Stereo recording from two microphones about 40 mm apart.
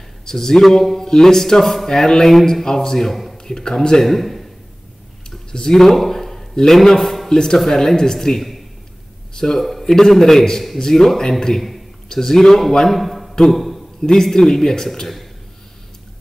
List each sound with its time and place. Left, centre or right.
0.2 s a man's voice: centre
5.5 s a man's voice: centre
9.6 s a man's voice: centre
13.0 s a sound: centre
14.0 s a man's voice: centre